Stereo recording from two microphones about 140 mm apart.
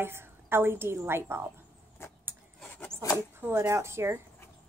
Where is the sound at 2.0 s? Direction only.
20° left (ahead or behind).